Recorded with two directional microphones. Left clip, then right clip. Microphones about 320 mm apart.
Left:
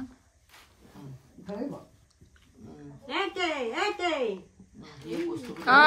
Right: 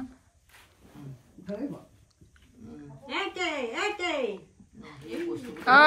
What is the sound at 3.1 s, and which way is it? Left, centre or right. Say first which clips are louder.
A woman's voice: left 1 dB; left.